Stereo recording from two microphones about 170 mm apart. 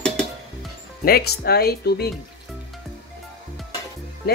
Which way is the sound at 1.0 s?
65° left (ahead or behind).